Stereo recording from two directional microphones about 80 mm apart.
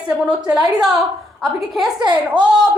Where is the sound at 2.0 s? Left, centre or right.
Right.